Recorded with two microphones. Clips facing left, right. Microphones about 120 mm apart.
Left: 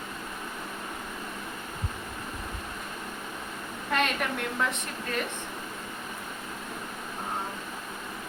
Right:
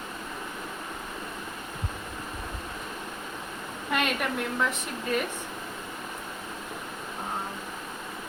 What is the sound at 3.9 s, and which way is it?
Speech, centre (ahead or behind).